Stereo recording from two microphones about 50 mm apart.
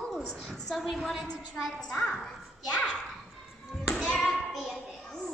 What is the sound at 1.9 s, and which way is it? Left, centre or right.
Speech, centre.